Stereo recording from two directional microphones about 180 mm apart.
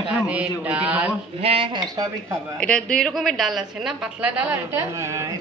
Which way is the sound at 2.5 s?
5° left (ahead or behind).